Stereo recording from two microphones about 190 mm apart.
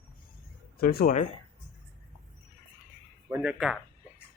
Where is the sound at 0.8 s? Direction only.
50° left (ahead or behind).